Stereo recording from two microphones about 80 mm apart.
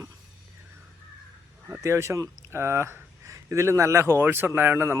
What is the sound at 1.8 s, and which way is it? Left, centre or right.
Speech, right.